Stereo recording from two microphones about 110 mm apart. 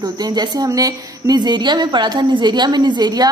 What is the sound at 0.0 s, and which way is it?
A woman's voice, 40° right (ahead or behind).